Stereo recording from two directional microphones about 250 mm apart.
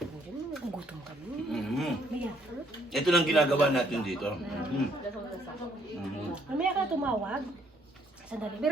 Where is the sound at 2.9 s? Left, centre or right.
Centre.